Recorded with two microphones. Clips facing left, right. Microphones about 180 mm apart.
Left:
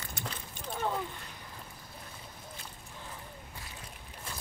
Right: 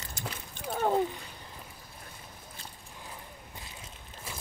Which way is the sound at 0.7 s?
40° right (ahead or behind).